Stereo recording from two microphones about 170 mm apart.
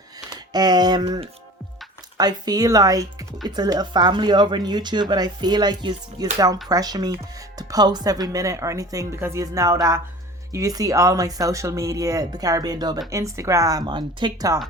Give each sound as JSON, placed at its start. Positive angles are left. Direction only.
{"t": 0.5, "sound": "speech", "side_deg": -25}